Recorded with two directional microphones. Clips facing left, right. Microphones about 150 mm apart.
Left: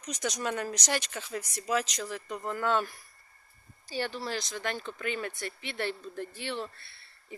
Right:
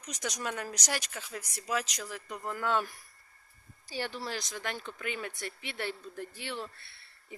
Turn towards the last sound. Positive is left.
turn(degrees=-15)  # may be behind; listen again after turning